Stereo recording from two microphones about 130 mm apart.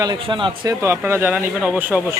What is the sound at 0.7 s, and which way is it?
Speech, 20° right (ahead or behind).